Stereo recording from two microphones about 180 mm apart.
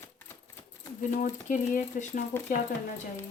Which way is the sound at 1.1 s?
45° left (ahead or behind).